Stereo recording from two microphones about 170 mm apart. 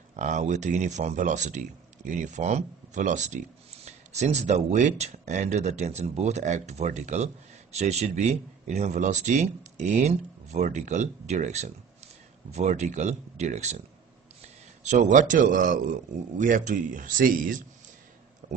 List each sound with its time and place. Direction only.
0.1 s speech: 45° right (ahead or behind)